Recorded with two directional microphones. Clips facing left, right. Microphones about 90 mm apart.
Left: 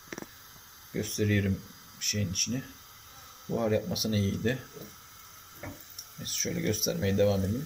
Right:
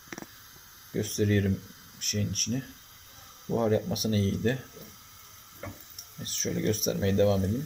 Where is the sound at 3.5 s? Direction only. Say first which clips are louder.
Right 2 dB; 40° right (ahead or behind).